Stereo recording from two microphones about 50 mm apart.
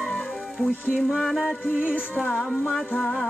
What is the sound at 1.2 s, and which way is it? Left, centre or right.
Music, centre.